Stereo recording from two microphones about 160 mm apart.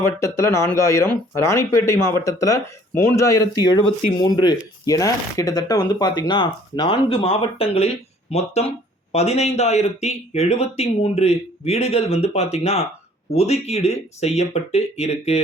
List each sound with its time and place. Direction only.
0.0 s speech: 15° left (ahead or behind); by 15.4 s 45° left (ahead or behind)